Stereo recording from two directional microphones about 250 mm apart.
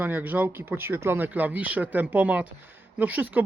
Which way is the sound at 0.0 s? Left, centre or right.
Centre.